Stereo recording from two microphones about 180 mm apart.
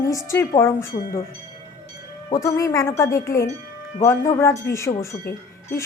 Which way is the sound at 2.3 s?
15° left (ahead or behind).